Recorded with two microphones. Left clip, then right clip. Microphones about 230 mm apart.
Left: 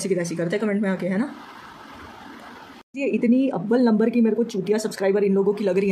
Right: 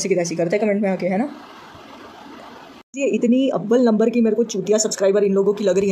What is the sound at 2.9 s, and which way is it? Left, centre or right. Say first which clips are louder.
Speech: right 3 dB; centre.